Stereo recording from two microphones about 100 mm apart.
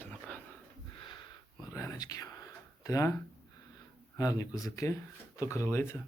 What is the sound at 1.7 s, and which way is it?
Whispering, 35° left (ahead or behind).